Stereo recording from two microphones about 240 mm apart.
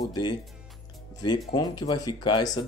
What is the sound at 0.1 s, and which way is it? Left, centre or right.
Speech, centre.